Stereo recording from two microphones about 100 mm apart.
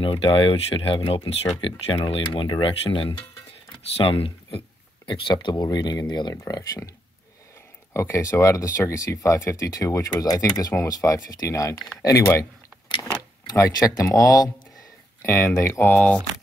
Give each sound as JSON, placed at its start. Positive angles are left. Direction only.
{"t": 0.0, "sound": "speech", "side_deg": 65}
{"t": 1.3, "sound": "speech", "side_deg": 90}
{"t": 1.9, "sound": "speech", "side_deg": 65}
{"t": 3.9, "sound": "speech", "side_deg": 70}
{"t": 6.3, "sound": "speech", "side_deg": 35}
{"t": 7.9, "sound": "speech", "side_deg": 30}
{"t": 13.5, "sound": "speech", "side_deg": 35}
{"t": 15.2, "sound": "speech", "side_deg": 20}
{"t": 15.5, "sound": "speech", "side_deg": 30}
{"t": 15.8, "sound": "speech", "side_deg": 10}